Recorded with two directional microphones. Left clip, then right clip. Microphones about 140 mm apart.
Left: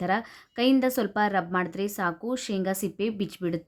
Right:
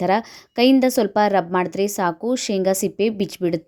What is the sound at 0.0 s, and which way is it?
Speech, 40° right (ahead or behind).